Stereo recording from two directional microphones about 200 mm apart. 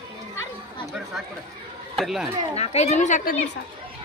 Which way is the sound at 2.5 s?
30° left (ahead or behind).